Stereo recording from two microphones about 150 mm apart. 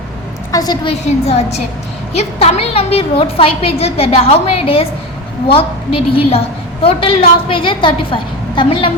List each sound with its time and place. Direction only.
0.5 s a woman's voice: 25° left (ahead or behind)
0.9 s a woman's voice: 45° left (ahead or behind)